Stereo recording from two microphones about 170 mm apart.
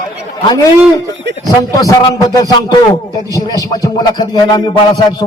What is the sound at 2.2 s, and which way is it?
A man's voice, 20° left (ahead or behind).